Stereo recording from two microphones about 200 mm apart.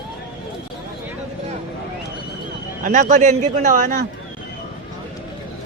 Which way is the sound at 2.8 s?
40° right (ahead or behind).